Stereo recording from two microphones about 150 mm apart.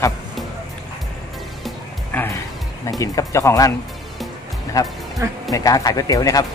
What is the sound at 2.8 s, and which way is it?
Speech, 25° left (ahead or behind).